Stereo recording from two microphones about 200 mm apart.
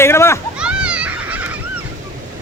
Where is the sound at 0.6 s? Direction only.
5° right (ahead or behind).